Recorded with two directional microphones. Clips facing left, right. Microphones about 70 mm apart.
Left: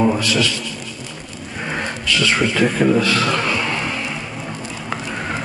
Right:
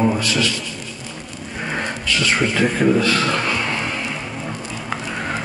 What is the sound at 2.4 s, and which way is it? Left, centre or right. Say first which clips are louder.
Speech: even; right.